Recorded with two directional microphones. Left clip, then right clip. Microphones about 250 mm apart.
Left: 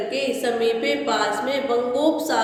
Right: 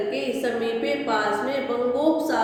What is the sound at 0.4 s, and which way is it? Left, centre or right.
Speech, centre.